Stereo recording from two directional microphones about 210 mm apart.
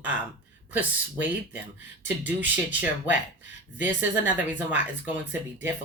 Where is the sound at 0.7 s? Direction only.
5° right (ahead or behind).